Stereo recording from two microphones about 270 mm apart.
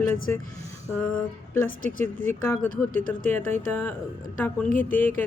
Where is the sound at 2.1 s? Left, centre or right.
Centre.